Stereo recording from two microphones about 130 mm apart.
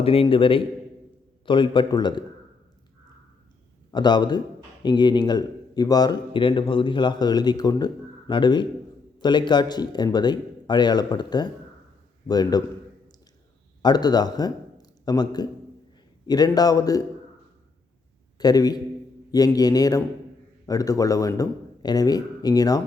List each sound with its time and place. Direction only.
0.0 s a man's voice: 45° left (ahead or behind)
3.9 s a man's voice: 35° left (ahead or behind)
13.8 s a man's voice: 30° left (ahead or behind)
18.3 s a man's voice: 30° left (ahead or behind)